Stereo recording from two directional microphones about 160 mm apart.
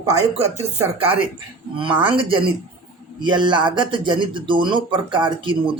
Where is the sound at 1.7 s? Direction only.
30° right (ahead or behind).